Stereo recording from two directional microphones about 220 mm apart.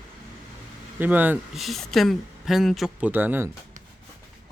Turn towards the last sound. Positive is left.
turn(degrees=-10)  # may be behind; listen again after turning